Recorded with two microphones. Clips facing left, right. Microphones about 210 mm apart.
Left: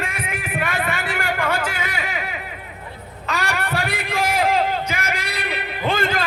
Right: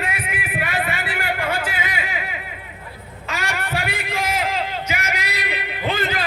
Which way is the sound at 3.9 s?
55° left (ahead or behind).